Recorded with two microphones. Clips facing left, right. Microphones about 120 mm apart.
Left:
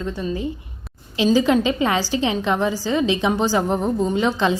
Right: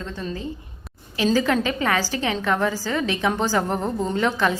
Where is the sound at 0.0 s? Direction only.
15° left (ahead or behind).